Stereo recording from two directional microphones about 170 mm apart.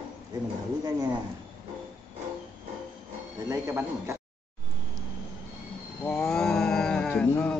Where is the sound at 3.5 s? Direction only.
15° right (ahead or behind).